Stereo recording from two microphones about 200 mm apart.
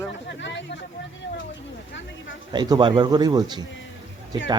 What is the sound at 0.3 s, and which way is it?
Chatter, 65° left (ahead or behind).